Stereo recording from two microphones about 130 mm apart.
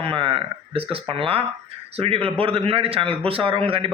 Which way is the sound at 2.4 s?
45° right (ahead or behind).